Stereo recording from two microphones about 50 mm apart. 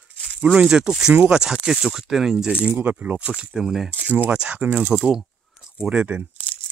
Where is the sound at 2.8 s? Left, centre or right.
Right.